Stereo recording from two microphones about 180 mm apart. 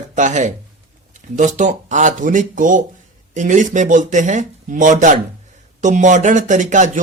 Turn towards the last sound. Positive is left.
turn(degrees=-45)  # may be behind; listen again after turning